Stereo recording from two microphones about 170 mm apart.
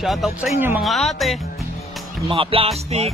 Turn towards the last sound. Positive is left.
turn(degrees=-35)  # may be behind; listen again after turning